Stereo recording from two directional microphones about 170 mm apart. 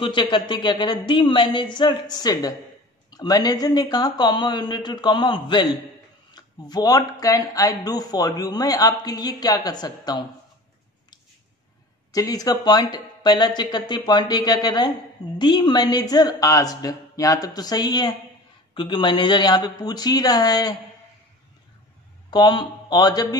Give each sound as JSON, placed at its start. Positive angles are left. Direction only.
{"t": 0.0, "sound": "speech", "side_deg": 30}
{"t": 6.7, "sound": "speech", "side_deg": 25}
{"t": 12.1, "sound": "speech", "side_deg": 20}
{"t": 22.3, "sound": "a man's voice", "side_deg": 25}